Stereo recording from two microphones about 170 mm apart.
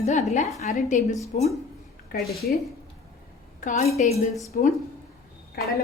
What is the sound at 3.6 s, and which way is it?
Speech, 45° left (ahead or behind).